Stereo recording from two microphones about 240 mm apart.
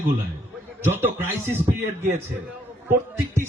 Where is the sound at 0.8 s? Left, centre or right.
Centre.